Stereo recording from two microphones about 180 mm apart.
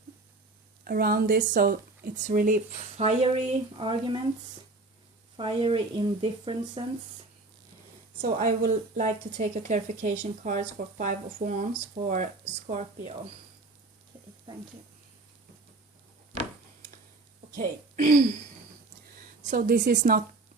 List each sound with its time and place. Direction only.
0.9 s speech: 55° right (ahead or behind)
3.0 s speech: 35° right (ahead or behind)
5.4 s speech: 30° right (ahead or behind)
8.2 s a woman's voice: 45° right (ahead or behind)
17.5 s a woman's voice: 50° right (ahead or behind)
19.4 s speech: 45° right (ahead or behind)